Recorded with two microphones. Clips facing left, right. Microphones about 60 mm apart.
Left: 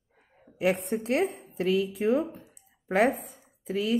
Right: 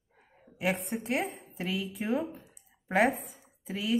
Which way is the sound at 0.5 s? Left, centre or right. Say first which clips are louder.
Left 5 dB; centre.